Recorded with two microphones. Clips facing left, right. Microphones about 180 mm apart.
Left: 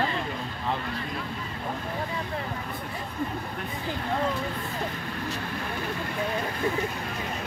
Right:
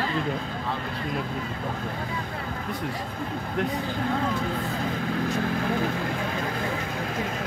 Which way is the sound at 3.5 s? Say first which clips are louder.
Right 8 dB; 75° right (ahead or behind).